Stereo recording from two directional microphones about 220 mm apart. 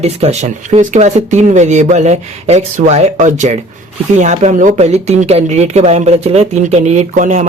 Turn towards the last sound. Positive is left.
turn(degrees=-35)  # may be behind; listen again after turning